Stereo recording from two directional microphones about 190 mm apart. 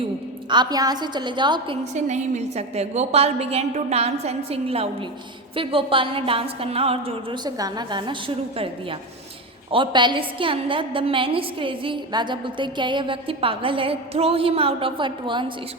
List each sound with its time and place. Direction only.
0.5 s a woman's voice: 20° right (ahead or behind)